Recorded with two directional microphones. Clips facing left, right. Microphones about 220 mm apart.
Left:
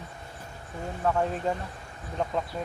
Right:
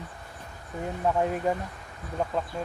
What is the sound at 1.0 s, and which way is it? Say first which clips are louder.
Speech: right 1 dB; 15° right (ahead or behind).